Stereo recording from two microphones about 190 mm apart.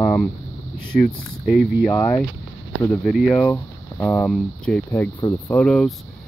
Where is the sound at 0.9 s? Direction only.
Centre (ahead or behind).